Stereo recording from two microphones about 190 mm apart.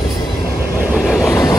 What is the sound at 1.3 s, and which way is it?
Vehicle, 20° left (ahead or behind).